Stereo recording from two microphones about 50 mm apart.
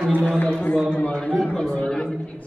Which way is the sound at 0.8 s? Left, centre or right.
Left.